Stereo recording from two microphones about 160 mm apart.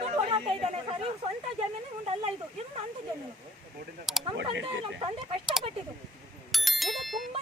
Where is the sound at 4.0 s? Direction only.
Centre (ahead or behind).